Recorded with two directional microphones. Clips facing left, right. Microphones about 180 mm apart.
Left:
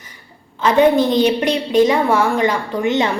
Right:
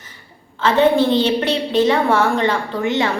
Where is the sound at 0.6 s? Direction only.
15° left (ahead or behind).